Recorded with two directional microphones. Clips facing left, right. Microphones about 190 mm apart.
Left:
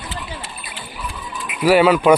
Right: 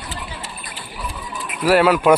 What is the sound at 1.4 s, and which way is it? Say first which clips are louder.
Speech: left 2 dB; centre (ahead or behind).